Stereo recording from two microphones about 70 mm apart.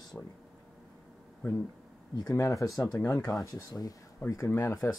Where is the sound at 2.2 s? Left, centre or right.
Left.